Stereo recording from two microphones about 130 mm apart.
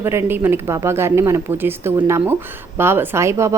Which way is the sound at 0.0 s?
20° right (ahead or behind).